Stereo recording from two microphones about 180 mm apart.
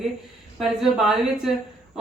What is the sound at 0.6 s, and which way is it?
Speech, centre (ahead or behind).